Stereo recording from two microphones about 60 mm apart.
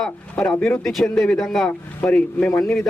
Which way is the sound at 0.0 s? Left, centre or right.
Centre.